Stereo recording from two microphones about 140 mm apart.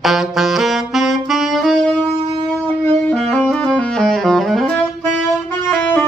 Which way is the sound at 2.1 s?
35° right (ahead or behind).